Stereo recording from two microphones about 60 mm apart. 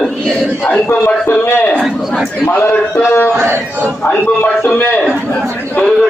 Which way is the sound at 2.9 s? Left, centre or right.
Left.